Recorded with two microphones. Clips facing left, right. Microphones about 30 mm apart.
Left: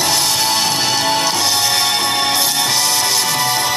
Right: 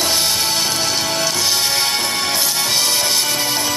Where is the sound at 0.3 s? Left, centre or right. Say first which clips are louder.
Left 2 dB; left.